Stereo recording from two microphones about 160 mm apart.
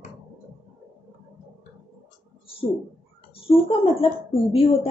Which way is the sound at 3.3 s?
35° left (ahead or behind).